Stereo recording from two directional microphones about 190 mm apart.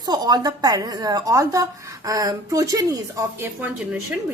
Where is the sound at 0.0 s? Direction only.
20° right (ahead or behind).